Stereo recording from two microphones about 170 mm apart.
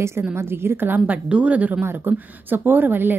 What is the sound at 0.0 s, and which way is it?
A woman's voice, 15° right (ahead or behind).